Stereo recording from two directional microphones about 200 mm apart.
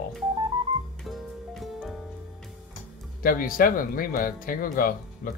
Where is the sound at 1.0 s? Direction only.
Centre (ahead or behind).